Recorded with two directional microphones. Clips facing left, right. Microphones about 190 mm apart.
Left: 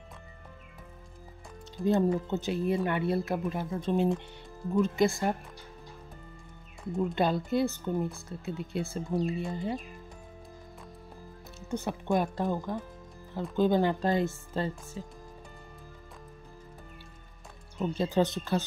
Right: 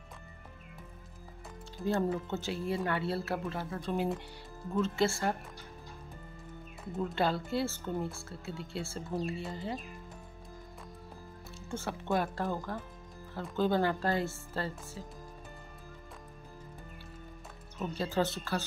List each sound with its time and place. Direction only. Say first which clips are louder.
1.9 s speech: left 5 dB; 20° left (ahead or behind)
7.2 s speech: left 3 dB; 20° left (ahead or behind)
11.7 s speech: left 4 dB; 20° left (ahead or behind)
17.7 s speech: left 5 dB; 20° left (ahead or behind)